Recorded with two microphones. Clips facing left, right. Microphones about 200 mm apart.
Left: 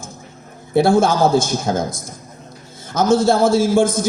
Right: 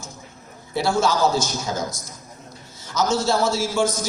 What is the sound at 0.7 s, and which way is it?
A man's voice, 55° left (ahead or behind).